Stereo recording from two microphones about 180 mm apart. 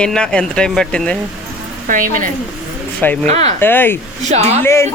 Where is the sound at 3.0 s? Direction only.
10° left (ahead or behind).